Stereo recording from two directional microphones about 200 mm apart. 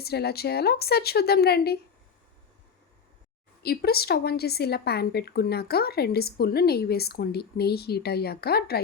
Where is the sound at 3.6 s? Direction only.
50° left (ahead or behind).